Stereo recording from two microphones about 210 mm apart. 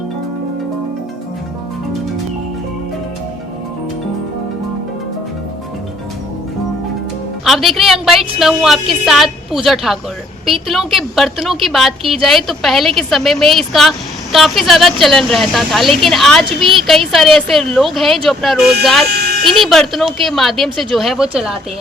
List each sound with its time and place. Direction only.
7.4 s music: centre (ahead or behind)
7.8 s a woman's voice: centre (ahead or behind)
19.0 s a sound: 50° right (ahead or behind)
19.5 s a woman's voice: centre (ahead or behind)